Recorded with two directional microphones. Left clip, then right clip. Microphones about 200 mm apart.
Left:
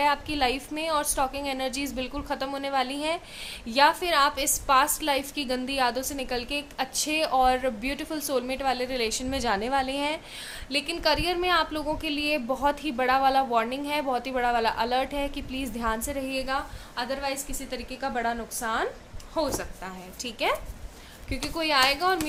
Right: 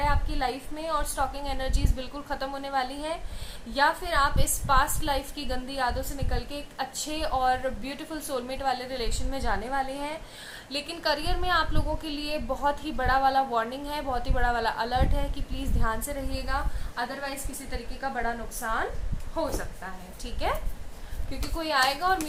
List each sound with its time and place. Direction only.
0.0 s a woman's voice: 50° left (ahead or behind)